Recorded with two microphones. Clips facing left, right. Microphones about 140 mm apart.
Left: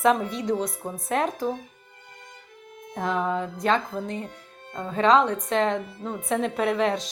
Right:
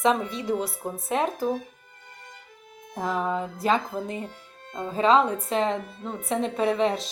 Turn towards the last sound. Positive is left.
turn(degrees=0)  # may be behind; listen again after turning